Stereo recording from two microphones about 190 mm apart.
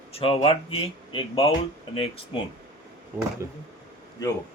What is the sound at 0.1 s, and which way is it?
Speech, 30° left (ahead or behind).